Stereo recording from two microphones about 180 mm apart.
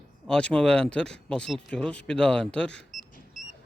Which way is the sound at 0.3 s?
5° left (ahead or behind).